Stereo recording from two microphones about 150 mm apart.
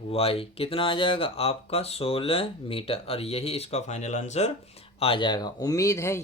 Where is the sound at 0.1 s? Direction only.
40° left (ahead or behind).